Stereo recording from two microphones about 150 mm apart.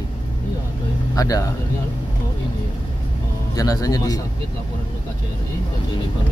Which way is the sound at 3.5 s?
25° left (ahead or behind).